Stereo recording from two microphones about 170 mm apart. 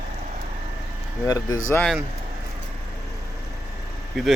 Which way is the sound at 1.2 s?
20° left (ahead or behind).